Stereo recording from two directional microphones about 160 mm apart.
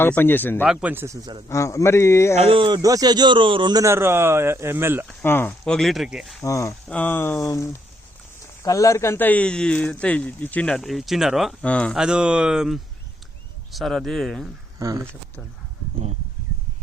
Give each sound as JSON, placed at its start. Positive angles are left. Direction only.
{"t": 0.0, "sound": "speech", "side_deg": 15}
{"t": 0.6, "sound": "speech", "side_deg": -10}
{"t": 1.5, "sound": "speech", "side_deg": 20}
{"t": 2.3, "sound": "speech", "side_deg": -35}
{"t": 5.0, "sound": "speech", "side_deg": 15}
{"t": 6.4, "sound": "speech", "side_deg": 20}
{"t": 11.9, "sound": "speech", "side_deg": -5}
{"t": 14.8, "sound": "speech", "side_deg": -20}